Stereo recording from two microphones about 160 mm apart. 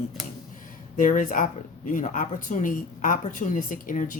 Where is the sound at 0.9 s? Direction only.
55° left (ahead or behind).